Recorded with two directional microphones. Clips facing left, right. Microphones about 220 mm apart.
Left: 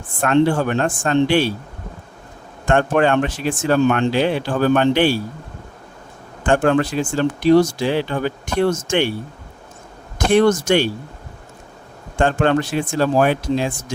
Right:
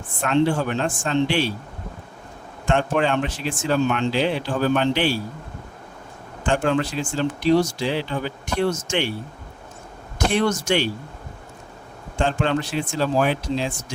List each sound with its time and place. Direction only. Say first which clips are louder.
0.2 s speech: left 4 dB; 55° left (ahead or behind)
2.6 s speech: left 5 dB; 55° left (ahead or behind)
6.4 s speech: left 5 dB; 55° left (ahead or behind)
10.3 s speech: left 7 dB; 50° left (ahead or behind)
12.1 s speech: left 5 dB; 55° left (ahead or behind)